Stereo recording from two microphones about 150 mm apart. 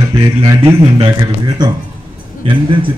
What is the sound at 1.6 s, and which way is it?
Speech, 30° right (ahead or behind).